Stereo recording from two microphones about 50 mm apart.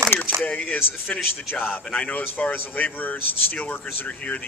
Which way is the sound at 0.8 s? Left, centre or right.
Left.